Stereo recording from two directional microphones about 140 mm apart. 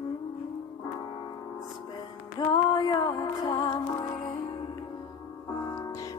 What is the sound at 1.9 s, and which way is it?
Music, 30° left (ahead or behind).